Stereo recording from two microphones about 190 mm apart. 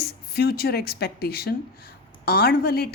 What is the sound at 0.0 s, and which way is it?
Speech, 55° left (ahead or behind).